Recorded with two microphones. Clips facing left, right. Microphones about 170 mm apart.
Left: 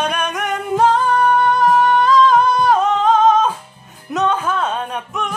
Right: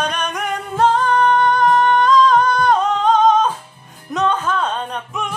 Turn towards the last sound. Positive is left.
turn(degrees=5)  # may be behind; listen again after turning